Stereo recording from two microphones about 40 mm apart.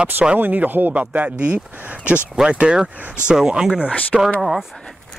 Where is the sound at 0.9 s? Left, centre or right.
Right.